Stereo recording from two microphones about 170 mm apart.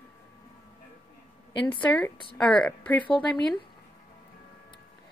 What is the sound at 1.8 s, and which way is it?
A woman's voice, 5° left (ahead or behind).